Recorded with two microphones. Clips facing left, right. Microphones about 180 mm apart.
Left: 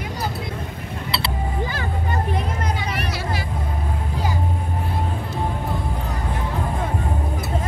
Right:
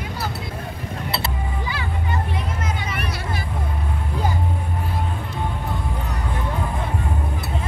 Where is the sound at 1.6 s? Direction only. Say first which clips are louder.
Left 2 dB; 45° left (ahead or behind).